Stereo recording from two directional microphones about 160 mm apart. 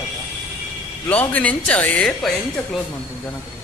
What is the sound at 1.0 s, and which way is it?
Speech, 10° left (ahead or behind).